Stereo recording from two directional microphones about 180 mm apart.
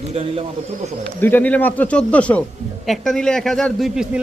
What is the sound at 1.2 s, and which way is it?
A man's voice, 10° left (ahead or behind).